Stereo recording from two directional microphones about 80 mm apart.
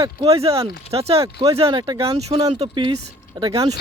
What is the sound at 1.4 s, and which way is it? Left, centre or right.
Speech, right.